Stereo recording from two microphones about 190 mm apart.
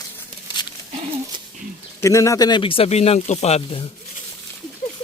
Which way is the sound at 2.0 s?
15° left (ahead or behind).